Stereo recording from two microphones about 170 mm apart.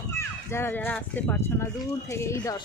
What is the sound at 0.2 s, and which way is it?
Speech, 15° left (ahead or behind).